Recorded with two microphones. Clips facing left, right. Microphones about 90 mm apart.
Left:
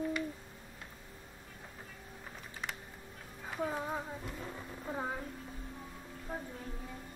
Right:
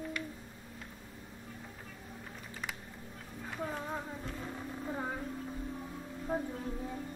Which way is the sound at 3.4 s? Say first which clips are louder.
Left 2 dB; 5° left (ahead or behind).